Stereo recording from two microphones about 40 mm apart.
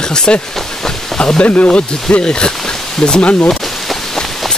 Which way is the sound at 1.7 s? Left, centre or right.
Left.